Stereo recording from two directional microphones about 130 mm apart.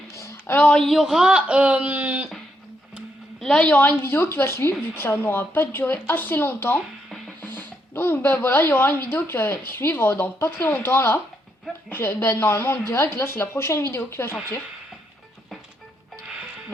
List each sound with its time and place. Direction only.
0.2 s speech: 20° left (ahead or behind); by 2.3 s 10° right (ahead or behind)
3.4 s speech: 10° left (ahead or behind)
7.1 s music: 10° left (ahead or behind)
9.0 s speech: 15° left (ahead or behind)
16.2 s music: 5° right (ahead or behind)